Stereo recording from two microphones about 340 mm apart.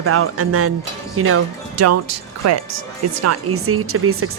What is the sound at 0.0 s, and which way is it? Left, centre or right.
Speech, right.